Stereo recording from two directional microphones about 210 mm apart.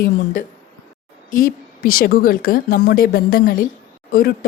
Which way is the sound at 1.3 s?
40° left (ahead or behind).